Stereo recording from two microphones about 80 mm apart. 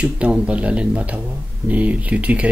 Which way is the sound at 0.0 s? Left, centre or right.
Centre.